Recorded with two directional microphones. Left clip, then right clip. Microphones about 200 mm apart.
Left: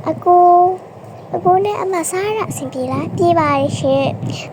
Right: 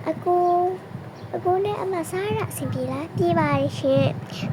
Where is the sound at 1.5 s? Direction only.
20° left (ahead or behind).